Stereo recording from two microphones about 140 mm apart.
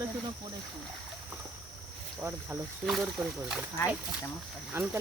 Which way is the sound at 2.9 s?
Centre (ahead or behind).